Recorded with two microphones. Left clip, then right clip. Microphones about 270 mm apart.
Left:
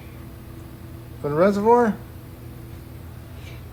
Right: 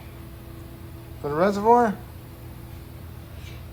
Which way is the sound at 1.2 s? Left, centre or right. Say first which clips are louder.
Left 3 dB; centre.